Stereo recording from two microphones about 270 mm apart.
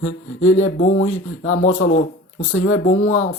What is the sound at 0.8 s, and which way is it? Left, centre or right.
Speech, left.